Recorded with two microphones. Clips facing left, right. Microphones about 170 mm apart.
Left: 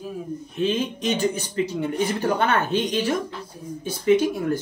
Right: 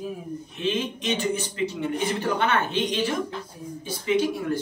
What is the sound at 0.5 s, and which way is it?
Speech, 40° left (ahead or behind).